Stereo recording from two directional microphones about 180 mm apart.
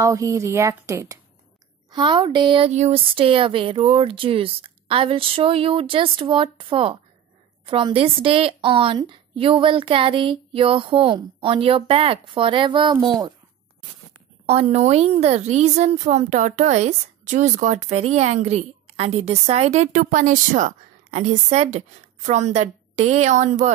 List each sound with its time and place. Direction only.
0.0 s a woman's voice: 20° right (ahead or behind)
14.4 s a woman's voice: 35° right (ahead or behind)